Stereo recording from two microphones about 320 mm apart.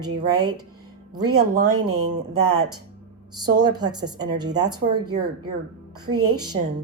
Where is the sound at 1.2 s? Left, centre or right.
Right.